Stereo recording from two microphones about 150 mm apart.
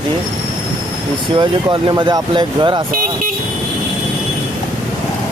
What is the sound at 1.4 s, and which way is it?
Speech, 30° right (ahead or behind).